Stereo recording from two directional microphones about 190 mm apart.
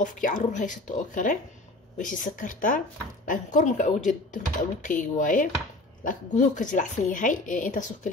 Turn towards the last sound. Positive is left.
turn(degrees=40)  # may be behind; listen again after turning